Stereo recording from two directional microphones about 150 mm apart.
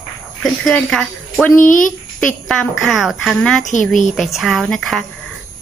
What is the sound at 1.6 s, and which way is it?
Speech, 60° left (ahead or behind).